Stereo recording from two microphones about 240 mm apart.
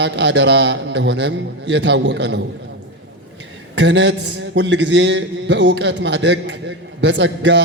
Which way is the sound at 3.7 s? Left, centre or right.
Right.